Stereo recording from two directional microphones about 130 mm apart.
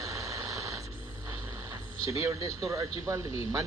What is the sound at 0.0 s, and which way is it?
Radio, 25° right (ahead or behind).